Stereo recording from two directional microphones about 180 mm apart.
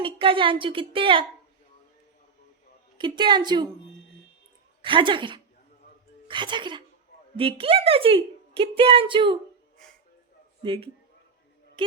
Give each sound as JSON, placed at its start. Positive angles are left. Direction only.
{"t": 0.0, "sound": "a woman's voice", "side_deg": -30}
{"t": 3.0, "sound": "a woman's voice", "side_deg": -25}
{"t": 4.8, "sound": "a woman's voice", "side_deg": -25}
{"t": 10.6, "sound": "a man's voice", "side_deg": -30}